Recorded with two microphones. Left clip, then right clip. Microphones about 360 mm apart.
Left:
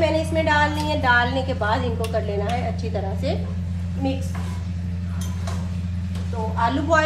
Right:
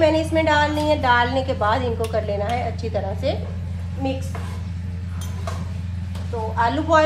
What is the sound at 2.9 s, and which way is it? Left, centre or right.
Speech, right.